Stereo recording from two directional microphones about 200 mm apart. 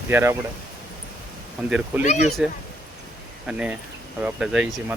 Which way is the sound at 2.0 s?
35° left (ahead or behind).